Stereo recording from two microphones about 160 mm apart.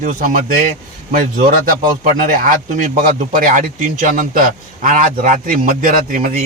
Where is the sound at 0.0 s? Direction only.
55° right (ahead or behind).